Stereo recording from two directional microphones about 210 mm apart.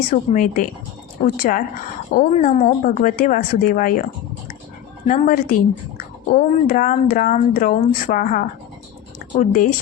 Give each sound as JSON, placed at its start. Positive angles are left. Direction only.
{"t": 0.1, "sound": "speech", "side_deg": 40}
{"t": 5.0, "sound": "speech", "side_deg": 40}
{"t": 9.1, "sound": "a sound", "side_deg": 40}